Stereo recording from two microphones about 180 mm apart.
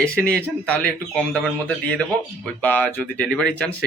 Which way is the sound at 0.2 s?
60° right (ahead or behind).